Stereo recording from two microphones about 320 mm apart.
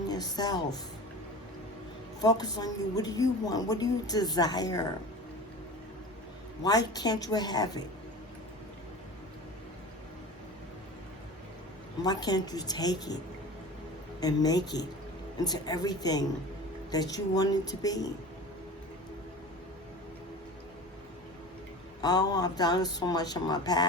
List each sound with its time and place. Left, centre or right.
0.1 s speech: centre
2.2 s speech: centre
6.6 s speech: centre
12.0 s speech: centre
14.2 s speech: centre
22.0 s speech: centre